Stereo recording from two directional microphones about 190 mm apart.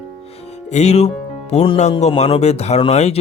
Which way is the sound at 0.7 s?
35° left (ahead or behind).